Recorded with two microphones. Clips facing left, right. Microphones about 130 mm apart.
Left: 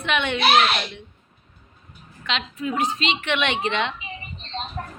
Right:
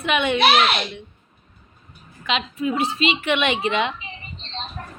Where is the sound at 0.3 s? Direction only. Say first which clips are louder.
Even; 60° right (ahead or behind).